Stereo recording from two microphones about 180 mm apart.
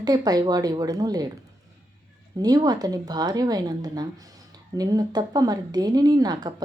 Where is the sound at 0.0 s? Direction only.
20° right (ahead or behind).